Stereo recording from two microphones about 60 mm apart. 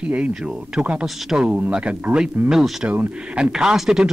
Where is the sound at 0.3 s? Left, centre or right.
Centre.